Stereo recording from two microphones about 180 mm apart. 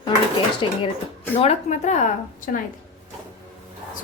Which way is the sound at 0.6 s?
30° left (ahead or behind).